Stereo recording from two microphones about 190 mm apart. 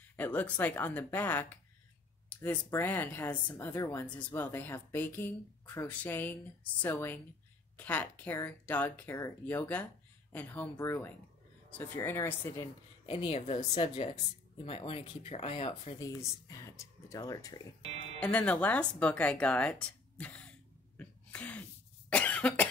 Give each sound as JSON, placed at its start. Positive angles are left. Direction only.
{"t": 0.1, "sound": "speech", "side_deg": 10}
{"t": 13.0, "sound": "speech", "side_deg": 30}
{"t": 18.2, "sound": "speech", "side_deg": 5}
{"t": 21.0, "sound": "sneeze", "side_deg": 5}
{"t": 22.1, "sound": "cough", "side_deg": 5}